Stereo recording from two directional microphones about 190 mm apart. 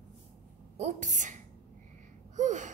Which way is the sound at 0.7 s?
40° right (ahead or behind).